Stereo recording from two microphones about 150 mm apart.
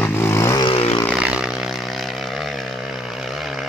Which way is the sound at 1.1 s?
5° right (ahead or behind).